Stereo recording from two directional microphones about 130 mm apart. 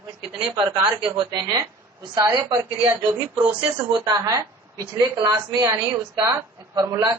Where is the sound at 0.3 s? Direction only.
40° right (ahead or behind).